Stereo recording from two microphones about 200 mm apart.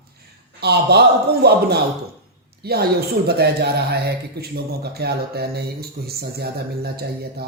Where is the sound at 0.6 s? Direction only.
55° right (ahead or behind).